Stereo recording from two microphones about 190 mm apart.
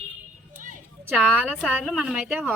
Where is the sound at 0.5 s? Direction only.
45° right (ahead or behind).